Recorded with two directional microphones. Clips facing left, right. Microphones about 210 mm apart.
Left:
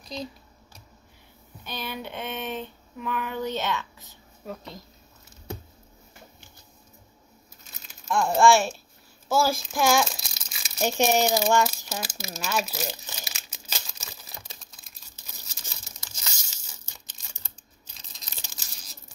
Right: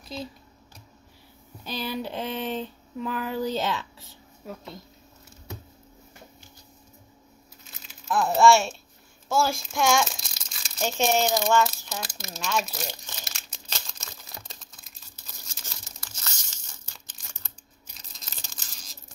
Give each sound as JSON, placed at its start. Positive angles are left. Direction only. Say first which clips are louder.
{"t": 0.0, "sound": "speech", "louder": "left 1 dB", "side_deg": -5}
{"t": 1.6, "sound": "speech", "louder": "right 4 dB", "side_deg": -35}
{"t": 4.1, "sound": "a woman's voice", "louder": "left 2 dB", "side_deg": 0}
{"t": 8.1, "sound": "speech", "louder": "even", "side_deg": 0}
{"t": 9.3, "sound": "crumpling", "louder": "left 1 dB", "side_deg": 0}
{"t": 15.2, "sound": "tearing", "louder": "even", "side_deg": 10}